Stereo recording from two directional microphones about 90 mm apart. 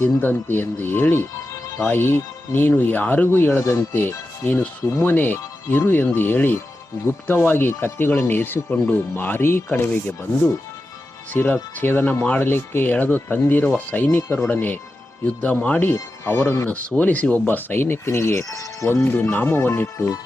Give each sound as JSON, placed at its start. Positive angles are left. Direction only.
{"t": 0.0, "sound": "speech", "side_deg": 20}
{"t": 11.3, "sound": "speech", "side_deg": 20}
{"t": 17.0, "sound": "speech", "side_deg": 15}
{"t": 18.9, "sound": "speech", "side_deg": 20}